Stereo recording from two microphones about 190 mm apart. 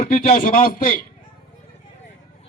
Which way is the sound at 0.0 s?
50° left (ahead or behind).